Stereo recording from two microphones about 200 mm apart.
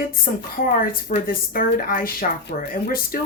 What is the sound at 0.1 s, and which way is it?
A woman's voice, 45° left (ahead or behind).